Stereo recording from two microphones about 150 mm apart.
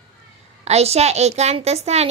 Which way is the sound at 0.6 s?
45° right (ahead or behind).